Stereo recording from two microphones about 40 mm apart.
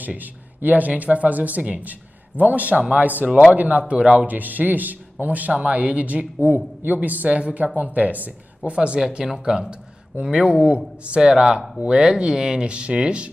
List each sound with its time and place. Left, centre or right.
0.0 s speech: right
4.3 s speech: right
8.7 s speech: right
9.0 s speech: centre; by 10.8 s right
11.1 s speech: centre